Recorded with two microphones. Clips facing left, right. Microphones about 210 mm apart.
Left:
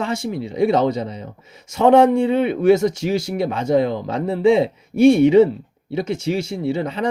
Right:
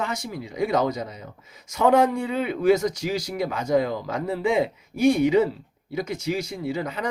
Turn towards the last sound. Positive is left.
turn(degrees=30)  # may be behind; listen again after turning